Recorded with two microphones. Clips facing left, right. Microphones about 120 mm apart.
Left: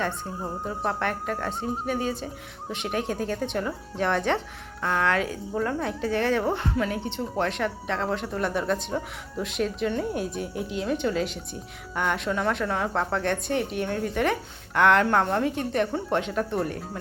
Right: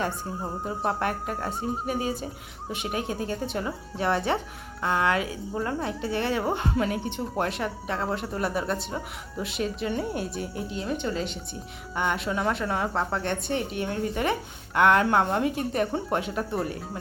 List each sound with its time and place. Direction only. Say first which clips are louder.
0.3 s a woman's voice: even; 5° right (ahead or behind)
6.5 s speech: even; 20° right (ahead or behind)
7.3 s a woman's voice: left 2 dB; 5° right (ahead or behind)